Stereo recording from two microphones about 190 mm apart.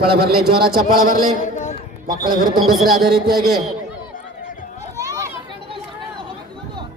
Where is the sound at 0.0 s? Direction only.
55° right (ahead or behind).